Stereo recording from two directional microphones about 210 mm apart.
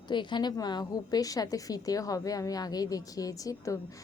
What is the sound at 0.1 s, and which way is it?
A woman's voice, 20° left (ahead or behind).